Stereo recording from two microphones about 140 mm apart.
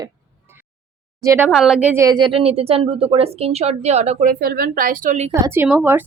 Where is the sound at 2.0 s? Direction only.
35° right (ahead or behind); by 5.1 s 85° right.